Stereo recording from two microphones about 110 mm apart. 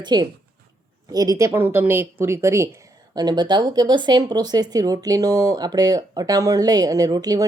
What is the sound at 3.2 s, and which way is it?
Speech, 40° right (ahead or behind).